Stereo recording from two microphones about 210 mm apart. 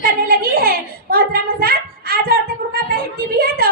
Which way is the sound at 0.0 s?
45° right (ahead or behind).